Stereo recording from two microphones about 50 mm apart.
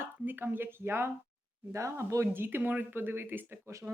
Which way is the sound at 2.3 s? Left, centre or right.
Right.